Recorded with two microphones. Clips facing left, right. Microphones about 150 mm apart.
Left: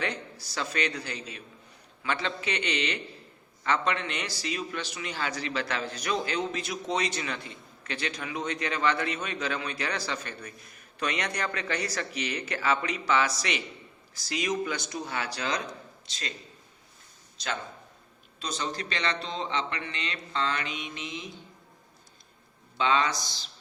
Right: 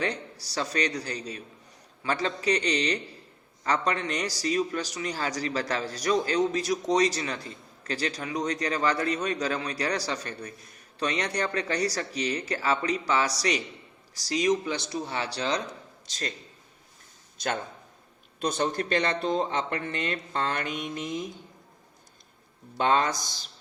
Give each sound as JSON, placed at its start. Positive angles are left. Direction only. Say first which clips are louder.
{"t": 0.0, "sound": "a man's voice", "louder": "right 2 dB", "side_deg": -35}
{"t": 16.0, "sound": "speech", "louder": "right 5 dB", "side_deg": -45}
{"t": 17.3, "sound": "a man's voice", "louder": "right 4 dB", "side_deg": -50}
{"t": 22.8, "sound": "speech", "louder": "right 2 dB", "side_deg": -50}